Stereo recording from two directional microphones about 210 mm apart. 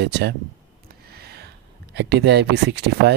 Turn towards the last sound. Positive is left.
turn(degrees=-55)  # may be behind; listen again after turning